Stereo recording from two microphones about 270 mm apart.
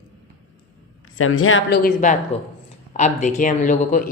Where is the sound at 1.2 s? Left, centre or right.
Left.